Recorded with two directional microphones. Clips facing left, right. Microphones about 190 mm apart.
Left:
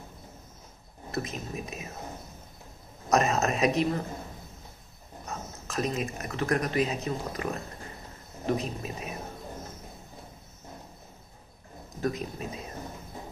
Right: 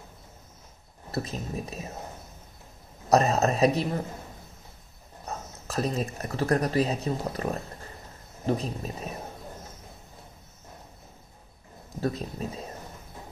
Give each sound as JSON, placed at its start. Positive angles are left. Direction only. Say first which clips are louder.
{"t": 1.1, "sound": "speech", "louder": "right 2 dB", "side_deg": -30}
{"t": 3.1, "sound": "speech", "louder": "right 3 dB", "side_deg": -35}
{"t": 5.2, "sound": "speech", "louder": "right 1 dB", "side_deg": -35}
{"t": 8.5, "sound": "speech", "louder": "right 1 dB", "side_deg": -35}
{"t": 12.0, "sound": "speech", "louder": "right 1 dB", "side_deg": -30}